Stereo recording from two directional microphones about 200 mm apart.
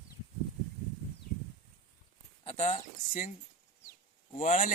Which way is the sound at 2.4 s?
35° left (ahead or behind).